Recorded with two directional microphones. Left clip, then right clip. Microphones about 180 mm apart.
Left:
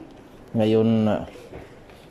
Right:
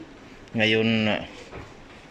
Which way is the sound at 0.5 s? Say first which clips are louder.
Left 1 dB; 25° left (ahead or behind).